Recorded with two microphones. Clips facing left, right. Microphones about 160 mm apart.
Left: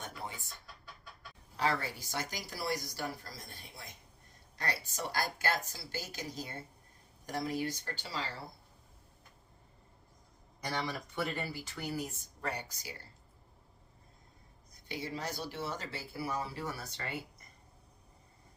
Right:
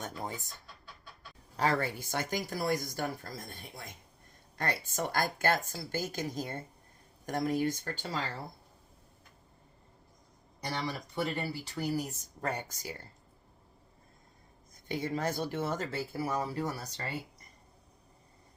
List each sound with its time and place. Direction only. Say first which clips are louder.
0.0 s speech: right 5 dB; 45° right (ahead or behind)
1.5 s speech: right 4 dB; 50° right (ahead or behind)
4.5 s speech: right 4 dB; 50° right (ahead or behind)
10.6 s speech: right 1 dB; 35° right (ahead or behind)
14.7 s speech: right 6 dB; 50° right (ahead or behind)